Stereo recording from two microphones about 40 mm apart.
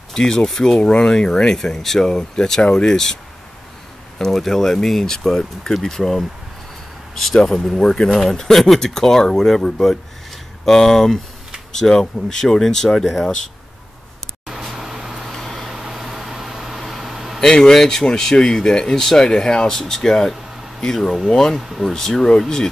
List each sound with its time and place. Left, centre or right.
0.1 s speech: centre
4.4 s speech: centre
7.4 s speech: centre
14.5 s vehicle: centre
15.3 s a sound: centre
15.7 s air conditioning: centre
17.4 s speech: centre
21.5 s speech: centre
21.8 s speech: centre